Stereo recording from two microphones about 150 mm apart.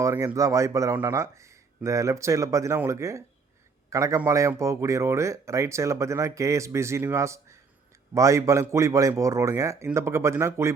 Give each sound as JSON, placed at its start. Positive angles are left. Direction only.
{"t": 0.0, "sound": "a man's voice", "side_deg": -20}